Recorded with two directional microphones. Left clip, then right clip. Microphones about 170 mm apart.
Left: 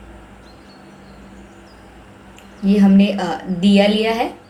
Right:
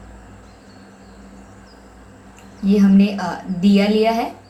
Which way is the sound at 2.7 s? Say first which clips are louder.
Left 1 dB; 45° left (ahead or behind).